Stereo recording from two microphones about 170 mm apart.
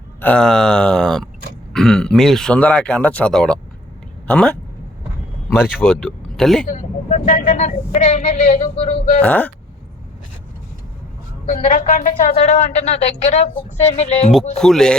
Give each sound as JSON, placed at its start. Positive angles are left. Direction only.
{"t": 0.2, "sound": "a man's voice", "side_deg": 5}
{"t": 5.5, "sound": "a man's voice", "side_deg": -5}
{"t": 6.7, "sound": "speech", "side_deg": 45}
{"t": 9.2, "sound": "speech", "side_deg": 10}
{"t": 11.5, "sound": "speech", "side_deg": 55}
{"t": 14.5, "sound": "a man's voice", "side_deg": 5}